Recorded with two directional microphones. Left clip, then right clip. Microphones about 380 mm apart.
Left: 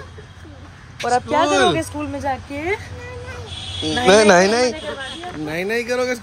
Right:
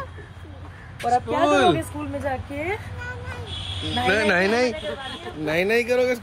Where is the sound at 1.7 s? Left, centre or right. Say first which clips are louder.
Left 2 dB; centre.